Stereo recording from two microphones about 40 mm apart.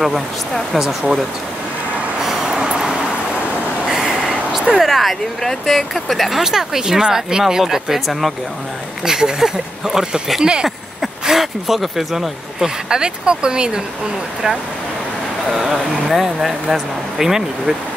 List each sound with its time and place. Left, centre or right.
0.7 s speech: centre
2.1 s vehicle: centre
2.8 s vehicle: centre
4.2 s speech: centre
11.0 s speech: centre; by 13.7 s right
15.5 s speech: centre